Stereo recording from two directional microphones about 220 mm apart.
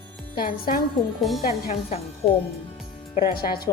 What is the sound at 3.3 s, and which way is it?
Speech, 45° left (ahead or behind).